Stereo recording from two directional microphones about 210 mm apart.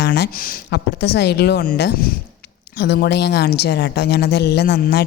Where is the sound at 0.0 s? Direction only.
50° left (ahead or behind).